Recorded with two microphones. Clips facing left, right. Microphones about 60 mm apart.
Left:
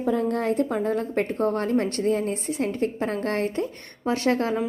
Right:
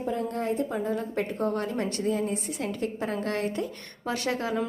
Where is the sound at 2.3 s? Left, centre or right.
Left.